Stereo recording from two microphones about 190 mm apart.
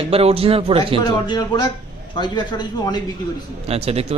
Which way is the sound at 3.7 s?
30° right (ahead or behind).